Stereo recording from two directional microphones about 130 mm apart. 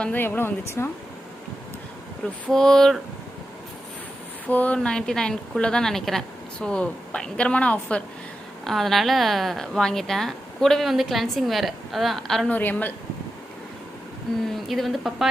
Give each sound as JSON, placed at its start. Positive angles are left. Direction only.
{"t": 0.0, "sound": "a woman's voice", "side_deg": 15}
{"t": 2.5, "sound": "a woman's voice", "side_deg": 5}
{"t": 4.4, "sound": "a woman's voice", "side_deg": 10}
{"t": 12.5, "sound": "a woman's voice", "side_deg": 15}
{"t": 14.5, "sound": "a woman's voice", "side_deg": 0}